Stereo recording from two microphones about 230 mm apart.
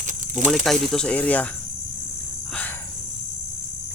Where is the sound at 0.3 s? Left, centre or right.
Right.